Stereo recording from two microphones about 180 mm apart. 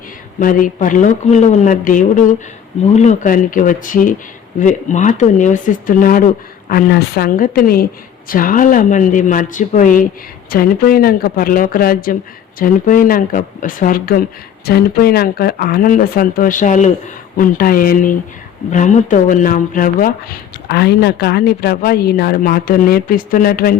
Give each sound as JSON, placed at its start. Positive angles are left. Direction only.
{"t": 0.3, "sound": "speech", "side_deg": 50}
{"t": 20.7, "sound": "speech", "side_deg": 65}